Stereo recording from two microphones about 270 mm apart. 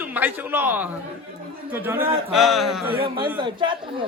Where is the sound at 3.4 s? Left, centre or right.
Centre.